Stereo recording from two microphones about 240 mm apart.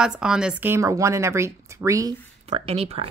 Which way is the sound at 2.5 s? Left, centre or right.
Right.